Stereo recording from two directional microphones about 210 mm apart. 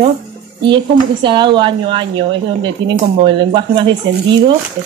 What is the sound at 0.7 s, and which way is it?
A woman's voice, 20° right (ahead or behind).